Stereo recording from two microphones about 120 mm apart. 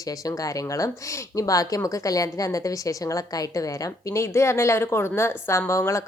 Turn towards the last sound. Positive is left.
turn(degrees=25)  # may be behind; listen again after turning